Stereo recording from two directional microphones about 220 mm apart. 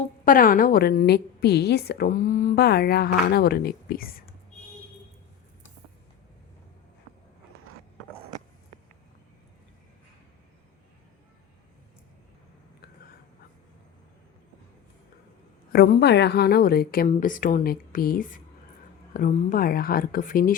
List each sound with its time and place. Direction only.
0.3 s a woman's voice: 40° left (ahead or behind)
15.7 s a woman's voice: 45° left (ahead or behind)